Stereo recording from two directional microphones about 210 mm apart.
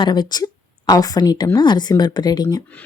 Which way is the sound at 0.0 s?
20° left (ahead or behind).